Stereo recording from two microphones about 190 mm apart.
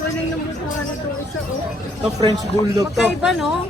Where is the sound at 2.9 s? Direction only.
Centre (ahead or behind).